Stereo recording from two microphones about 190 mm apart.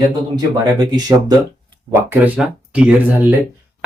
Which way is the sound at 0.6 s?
20° right (ahead or behind).